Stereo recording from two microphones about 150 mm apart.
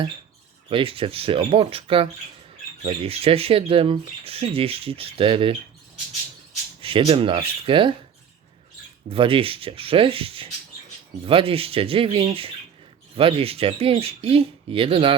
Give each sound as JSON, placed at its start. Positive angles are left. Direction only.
{"t": 0.7, "sound": "speech", "side_deg": -35}
{"t": 6.8, "sound": "speech", "side_deg": -35}
{"t": 9.0, "sound": "speech", "side_deg": -35}